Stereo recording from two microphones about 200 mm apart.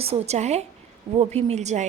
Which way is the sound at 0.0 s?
30° right (ahead or behind).